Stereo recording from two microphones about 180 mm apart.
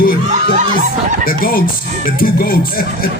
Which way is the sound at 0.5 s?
45° right (ahead or behind).